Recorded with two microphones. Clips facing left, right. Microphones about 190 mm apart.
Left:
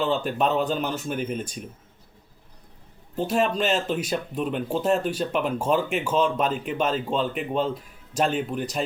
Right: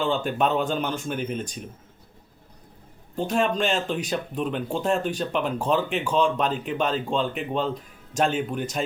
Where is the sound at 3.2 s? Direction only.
5° left (ahead or behind).